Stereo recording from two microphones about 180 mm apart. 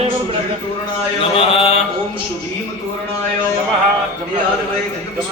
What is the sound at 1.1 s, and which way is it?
Mantra, 30° left (ahead or behind).